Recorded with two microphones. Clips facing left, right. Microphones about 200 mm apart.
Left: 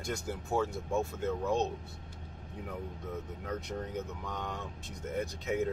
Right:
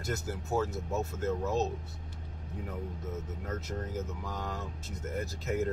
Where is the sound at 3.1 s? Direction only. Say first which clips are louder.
Left 2 dB; centre (ahead or behind).